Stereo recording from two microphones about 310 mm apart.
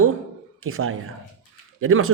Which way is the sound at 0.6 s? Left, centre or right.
Right.